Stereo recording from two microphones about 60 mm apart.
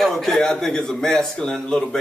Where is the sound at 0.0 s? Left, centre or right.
Centre.